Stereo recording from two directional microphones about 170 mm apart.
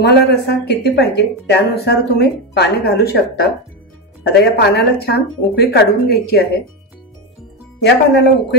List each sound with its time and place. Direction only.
0.0 s speech: 70° left (ahead or behind)
7.8 s speech: 75° left (ahead or behind)